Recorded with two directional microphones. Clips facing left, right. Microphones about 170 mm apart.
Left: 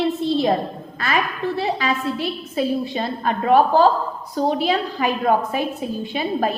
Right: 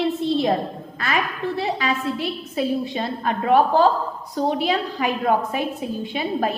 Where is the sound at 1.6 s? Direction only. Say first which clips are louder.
Left 1 dB; 35° left (ahead or behind).